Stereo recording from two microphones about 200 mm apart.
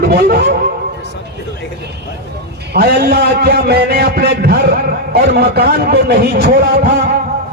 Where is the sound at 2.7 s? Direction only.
50° right (ahead or behind).